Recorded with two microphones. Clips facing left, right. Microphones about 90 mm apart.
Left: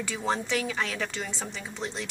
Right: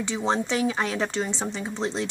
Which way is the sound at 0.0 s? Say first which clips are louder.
Right 4 dB; 25° right (ahead or behind).